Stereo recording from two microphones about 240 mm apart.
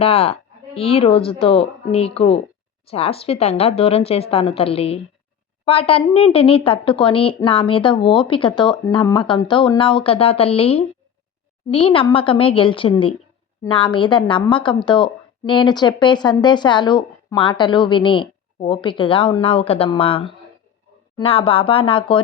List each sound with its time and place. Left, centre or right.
0.0 s a woman's voice: left